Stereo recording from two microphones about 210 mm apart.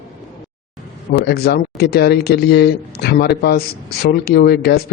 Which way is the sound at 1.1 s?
50° left (ahead or behind).